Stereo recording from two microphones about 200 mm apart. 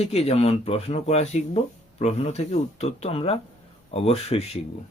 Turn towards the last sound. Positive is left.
turn(degrees=30)  # may be behind; listen again after turning